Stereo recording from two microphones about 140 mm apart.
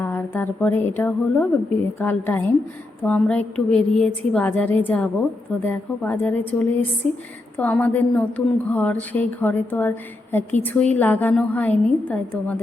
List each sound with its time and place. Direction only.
0.0 s a woman's voice: 15° left (ahead or behind)
7.0 s a woman's voice: centre (ahead or behind)